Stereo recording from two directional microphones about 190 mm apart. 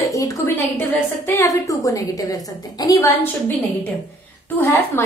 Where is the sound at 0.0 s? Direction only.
15° left (ahead or behind).